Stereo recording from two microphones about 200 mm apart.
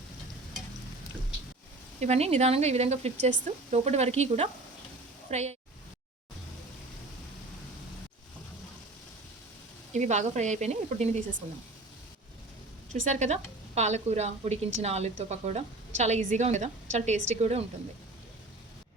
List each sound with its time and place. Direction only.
2.0 s a woman's voice: 35° right (ahead or behind)
9.9 s a woman's voice: 35° right (ahead or behind)
13.1 s a woman's voice: 35° right (ahead or behind)